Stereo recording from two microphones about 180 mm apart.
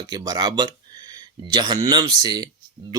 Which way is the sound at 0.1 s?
20° right (ahead or behind).